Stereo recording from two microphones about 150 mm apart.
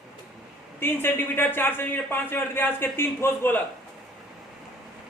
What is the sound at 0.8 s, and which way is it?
A man's voice, 15° left (ahead or behind).